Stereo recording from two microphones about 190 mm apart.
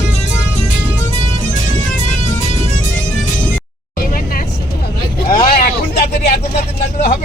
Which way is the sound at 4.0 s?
50° left (ahead or behind).